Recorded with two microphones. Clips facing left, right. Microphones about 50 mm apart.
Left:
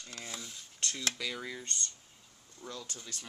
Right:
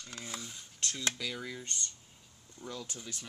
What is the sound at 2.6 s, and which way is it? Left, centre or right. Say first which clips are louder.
Speech: right 1 dB; centre.